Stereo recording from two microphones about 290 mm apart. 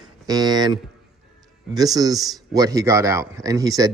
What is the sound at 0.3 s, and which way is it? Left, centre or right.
Speech, centre.